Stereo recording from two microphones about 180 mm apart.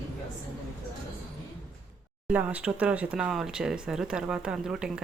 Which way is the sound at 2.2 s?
5° right (ahead or behind).